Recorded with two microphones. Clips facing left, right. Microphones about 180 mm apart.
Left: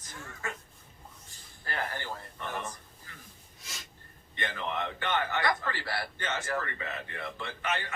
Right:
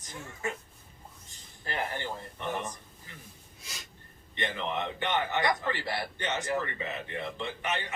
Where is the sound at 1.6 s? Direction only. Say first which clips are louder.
Right 2 dB; 20° right (ahead or behind).